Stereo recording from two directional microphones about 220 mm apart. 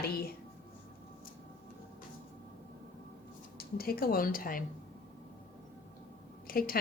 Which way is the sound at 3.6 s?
45° left (ahead or behind).